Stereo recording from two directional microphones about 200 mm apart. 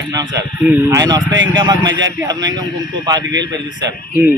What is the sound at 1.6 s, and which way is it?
A man's voice, 20° right (ahead or behind).